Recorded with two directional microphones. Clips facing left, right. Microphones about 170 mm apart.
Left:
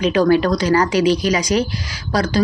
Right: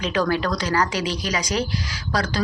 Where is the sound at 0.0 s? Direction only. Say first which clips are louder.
Left 8 dB; 15° left (ahead or behind).